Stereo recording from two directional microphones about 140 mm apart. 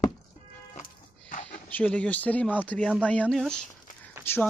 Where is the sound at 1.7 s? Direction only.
10° left (ahead or behind).